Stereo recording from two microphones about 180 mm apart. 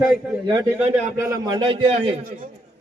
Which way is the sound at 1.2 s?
20° right (ahead or behind).